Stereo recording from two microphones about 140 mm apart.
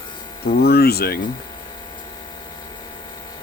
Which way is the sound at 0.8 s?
90° left.